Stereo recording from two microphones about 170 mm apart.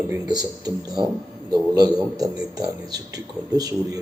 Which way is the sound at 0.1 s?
20° right (ahead or behind).